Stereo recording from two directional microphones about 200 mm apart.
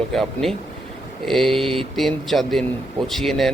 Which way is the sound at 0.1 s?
Centre (ahead or behind).